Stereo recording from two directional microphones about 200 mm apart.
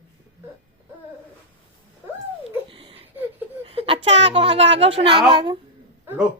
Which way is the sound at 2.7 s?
25° right (ahead or behind).